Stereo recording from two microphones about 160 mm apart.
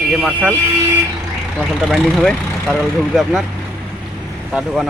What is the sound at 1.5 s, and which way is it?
Speech, centre (ahead or behind).